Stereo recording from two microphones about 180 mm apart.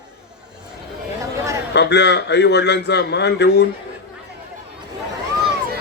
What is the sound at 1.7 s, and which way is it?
A man's voice, 70° left (ahead or behind).